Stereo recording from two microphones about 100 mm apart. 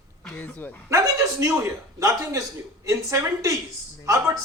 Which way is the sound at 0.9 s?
35° right (ahead or behind).